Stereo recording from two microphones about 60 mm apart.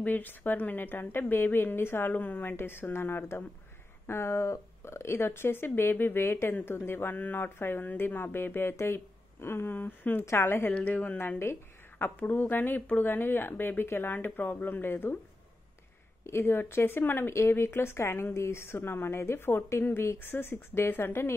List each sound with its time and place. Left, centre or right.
0.0 s speech: left
10.7 s a woman's voice: left
12.0 s speech: left
16.3 s speech: left